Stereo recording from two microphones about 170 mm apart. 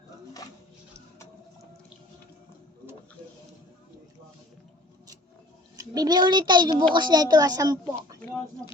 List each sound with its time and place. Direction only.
5.7 s a woman's voice: 20° right (ahead or behind)